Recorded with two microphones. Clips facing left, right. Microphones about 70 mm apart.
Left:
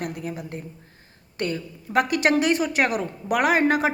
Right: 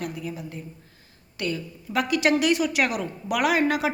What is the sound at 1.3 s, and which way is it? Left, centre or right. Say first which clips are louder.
A woman's voice: left 2 dB; left.